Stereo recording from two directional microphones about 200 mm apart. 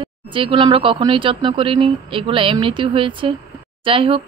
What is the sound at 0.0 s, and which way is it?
Speech, 25° right (ahead or behind).